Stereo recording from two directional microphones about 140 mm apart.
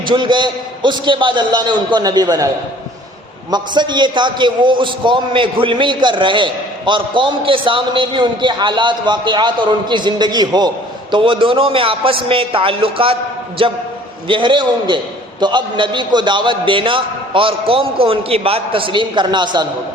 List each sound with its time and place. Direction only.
0.1 s a man's voice: 35° right (ahead or behind)
3.5 s a man's voice: 30° right (ahead or behind)